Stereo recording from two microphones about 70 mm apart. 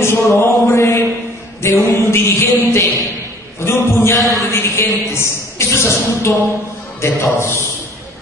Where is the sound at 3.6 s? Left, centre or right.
Left.